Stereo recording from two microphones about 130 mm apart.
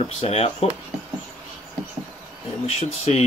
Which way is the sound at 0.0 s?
55° left (ahead or behind).